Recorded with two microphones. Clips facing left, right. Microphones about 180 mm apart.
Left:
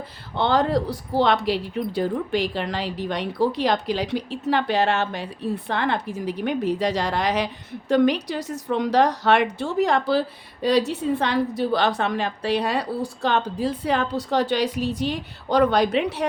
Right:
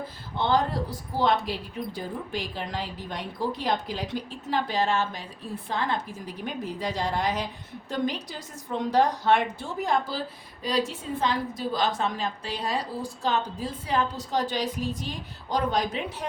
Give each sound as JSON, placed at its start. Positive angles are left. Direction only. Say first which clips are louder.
{"t": 0.3, "sound": "speech", "louder": "left 5 dB", "side_deg": 70}